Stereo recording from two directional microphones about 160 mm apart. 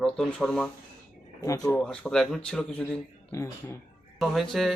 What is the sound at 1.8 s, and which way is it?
Speech, 5° left (ahead or behind).